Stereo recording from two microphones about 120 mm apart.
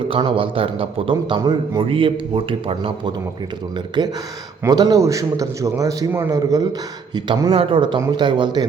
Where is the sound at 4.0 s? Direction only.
35° right (ahead or behind).